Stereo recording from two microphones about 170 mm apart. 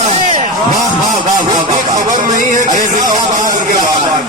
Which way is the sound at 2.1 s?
45° right (ahead or behind).